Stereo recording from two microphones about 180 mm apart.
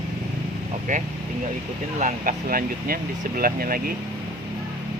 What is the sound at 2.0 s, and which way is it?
Speech, 45° right (ahead or behind).